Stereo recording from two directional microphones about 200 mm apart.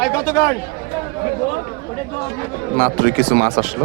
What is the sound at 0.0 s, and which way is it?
Speech, 15° left (ahead or behind).